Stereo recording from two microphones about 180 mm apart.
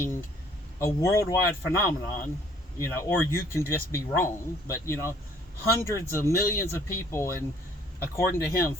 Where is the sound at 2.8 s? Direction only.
15° left (ahead or behind).